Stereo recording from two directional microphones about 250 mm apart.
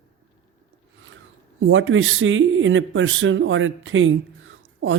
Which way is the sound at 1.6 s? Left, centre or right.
Right.